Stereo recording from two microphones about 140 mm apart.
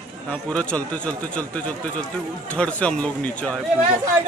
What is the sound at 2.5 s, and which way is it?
A man's voice, 10° left (ahead or behind).